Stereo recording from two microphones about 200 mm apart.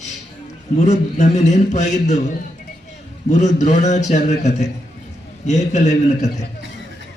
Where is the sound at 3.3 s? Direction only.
35° left (ahead or behind).